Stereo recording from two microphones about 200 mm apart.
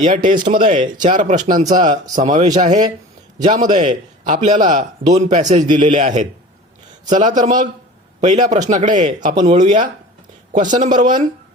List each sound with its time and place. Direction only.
0.3 s a man's voice: 40° right (ahead or behind)